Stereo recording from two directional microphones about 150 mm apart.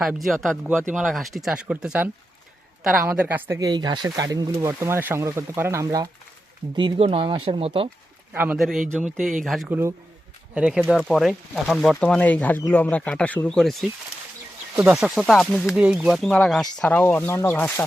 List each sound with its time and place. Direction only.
0.0 s speech: centre (ahead or behind)
3.1 s a woman's voice: 10° right (ahead or behind)
3.6 s speech: 25° right (ahead or behind)
8.3 s a man's voice: 10° right (ahead or behind)
9.6 s a woman's voice: 15° right (ahead or behind); by 13.9 s 5° left (ahead or behind)
14.8 s speech: 5° right (ahead or behind)
15.8 s speech: 10° right (ahead or behind); by 17.8 s 15° left (ahead or behind)